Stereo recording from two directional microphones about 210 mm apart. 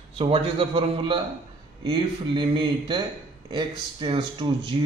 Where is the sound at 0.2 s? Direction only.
25° right (ahead or behind).